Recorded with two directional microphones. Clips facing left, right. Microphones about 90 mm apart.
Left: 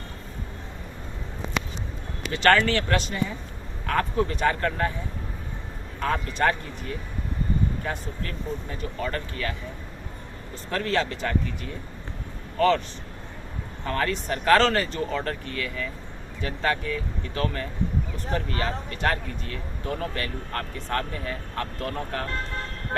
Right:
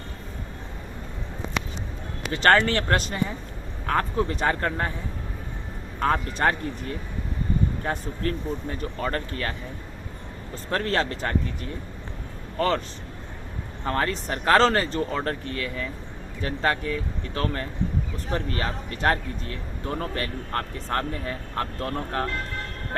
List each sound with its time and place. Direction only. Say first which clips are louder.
2.3 s speech: right 1 dB; 35° right (ahead or behind)
3.8 s speech: even; 30° right (ahead or behind)
6.0 s speech: right 1 dB; 35° right (ahead or behind)
10.7 s speech: right 1 dB; 40° right (ahead or behind)
12.5 s speech: left 3 dB; 35° right (ahead or behind)
13.8 s speech: right 1 dB; 35° right (ahead or behind)